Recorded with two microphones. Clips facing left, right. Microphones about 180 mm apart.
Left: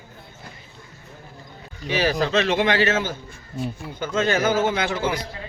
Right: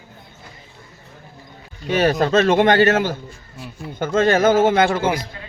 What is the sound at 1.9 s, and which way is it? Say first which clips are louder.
Speech: right 5 dB; 50° right (ahead or behind).